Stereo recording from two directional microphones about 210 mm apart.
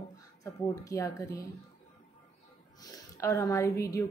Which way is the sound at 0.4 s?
15° left (ahead or behind).